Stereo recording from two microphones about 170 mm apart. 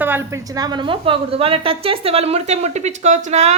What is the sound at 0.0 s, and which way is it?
A woman's voice, 15° right (ahead or behind).